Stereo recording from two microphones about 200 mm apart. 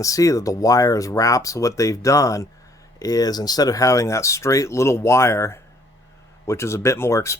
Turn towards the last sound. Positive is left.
turn(degrees=15)  # may be behind; listen again after turning